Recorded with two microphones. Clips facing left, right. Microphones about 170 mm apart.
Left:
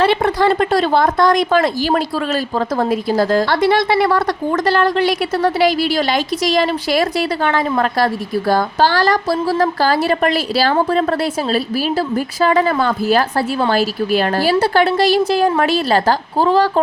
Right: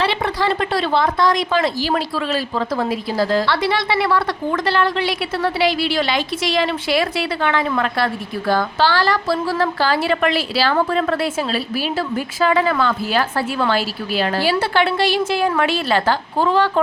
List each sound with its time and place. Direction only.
0.0 s a woman's voice: 45° left (ahead or behind)